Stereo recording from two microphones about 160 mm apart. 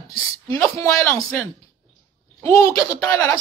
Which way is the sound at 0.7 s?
20° left (ahead or behind).